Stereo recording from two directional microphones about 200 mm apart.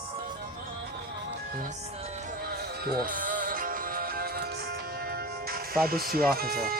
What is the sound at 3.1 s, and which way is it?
Music, 40° right (ahead or behind).